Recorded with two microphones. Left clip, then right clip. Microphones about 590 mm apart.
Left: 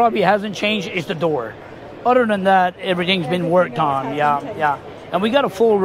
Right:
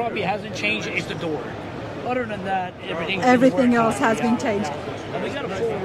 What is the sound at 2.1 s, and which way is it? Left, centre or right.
Speech, left.